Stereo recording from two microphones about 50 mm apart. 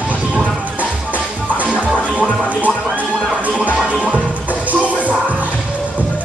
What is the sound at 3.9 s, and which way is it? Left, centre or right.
Music, right.